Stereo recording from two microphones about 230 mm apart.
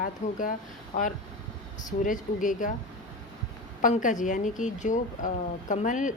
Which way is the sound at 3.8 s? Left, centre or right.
Left.